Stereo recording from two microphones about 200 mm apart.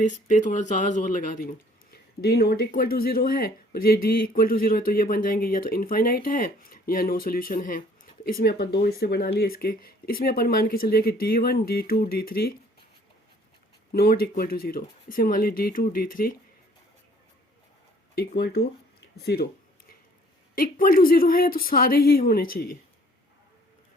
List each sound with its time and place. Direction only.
0.0 s speech: 40° left (ahead or behind)
1.9 s speech: 50° left (ahead or behind)
13.9 s speech: 50° left (ahead or behind)
18.1 s speech: 50° left (ahead or behind)
20.6 s speech: 45° left (ahead or behind)